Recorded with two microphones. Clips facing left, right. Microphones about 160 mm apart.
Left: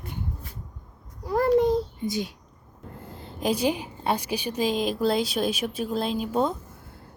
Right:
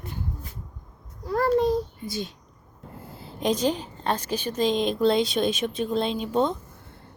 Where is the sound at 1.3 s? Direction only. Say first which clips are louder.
Left 2 dB; 20° left (ahead or behind).